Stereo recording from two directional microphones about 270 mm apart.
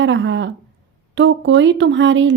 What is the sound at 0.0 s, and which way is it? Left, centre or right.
Speech, right.